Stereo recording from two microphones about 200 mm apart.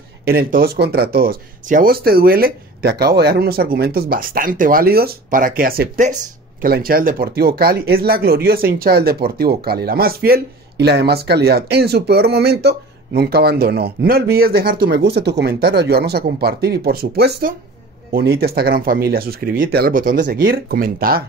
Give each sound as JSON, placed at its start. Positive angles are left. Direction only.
{"t": 0.2, "sound": "speech", "side_deg": -50}